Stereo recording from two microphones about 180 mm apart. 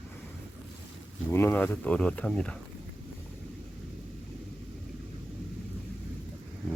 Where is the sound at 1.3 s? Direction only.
10° left (ahead or behind).